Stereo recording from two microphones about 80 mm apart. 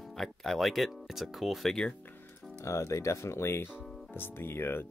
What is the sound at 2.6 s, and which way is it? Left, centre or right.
Speech, left.